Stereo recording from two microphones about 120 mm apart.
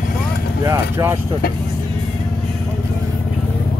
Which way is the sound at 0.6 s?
20° right (ahead or behind).